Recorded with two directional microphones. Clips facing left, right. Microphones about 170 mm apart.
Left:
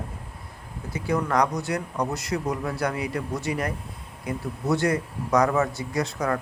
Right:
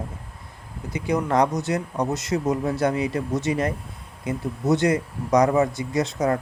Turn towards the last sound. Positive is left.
turn(degrees=-20)  # may be behind; listen again after turning